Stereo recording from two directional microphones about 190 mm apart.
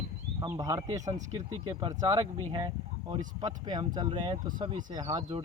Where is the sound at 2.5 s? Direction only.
30° right (ahead or behind).